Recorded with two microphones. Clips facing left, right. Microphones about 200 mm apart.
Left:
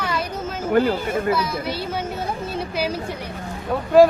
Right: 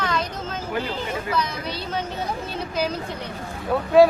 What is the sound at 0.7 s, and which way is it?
Speech, 50° left (ahead or behind).